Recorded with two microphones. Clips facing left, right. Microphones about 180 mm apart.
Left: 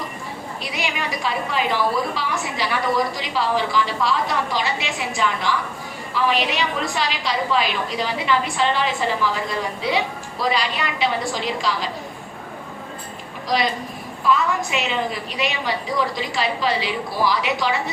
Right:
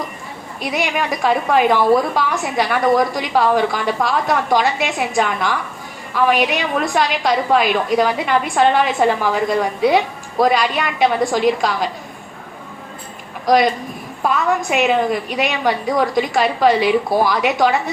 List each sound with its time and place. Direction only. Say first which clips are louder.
0.6 s a woman's voice: right 8 dB; 50° right (ahead or behind)
13.4 s a woman's voice: right 8 dB; 50° right (ahead or behind)